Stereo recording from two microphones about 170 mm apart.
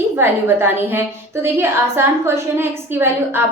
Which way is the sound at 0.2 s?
15° right (ahead or behind).